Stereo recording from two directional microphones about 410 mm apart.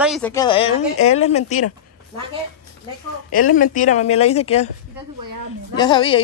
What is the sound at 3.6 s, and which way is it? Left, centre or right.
Speech, centre.